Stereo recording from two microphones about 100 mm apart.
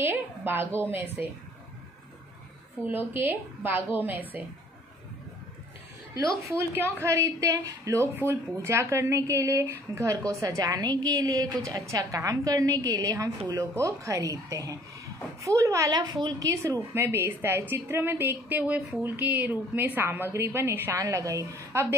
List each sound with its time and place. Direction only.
0.0 s a woman's voice: 20° right (ahead or behind)
2.9 s a woman's voice: 20° right (ahead or behind)
6.5 s a woman's voice: 25° right (ahead or behind)